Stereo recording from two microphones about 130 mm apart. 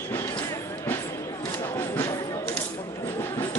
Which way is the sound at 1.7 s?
20° left (ahead or behind).